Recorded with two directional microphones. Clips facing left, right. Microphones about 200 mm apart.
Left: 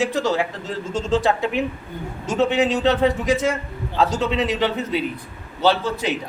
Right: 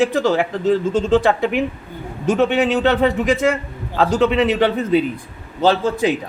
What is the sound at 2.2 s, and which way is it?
Speech, 60° right (ahead or behind).